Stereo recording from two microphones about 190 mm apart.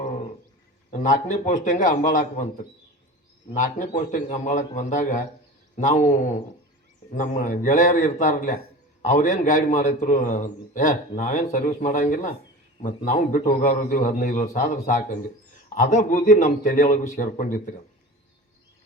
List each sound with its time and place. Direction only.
0.9 s a man's voice: 40° left (ahead or behind)
3.5 s a man's voice: 40° left (ahead or behind)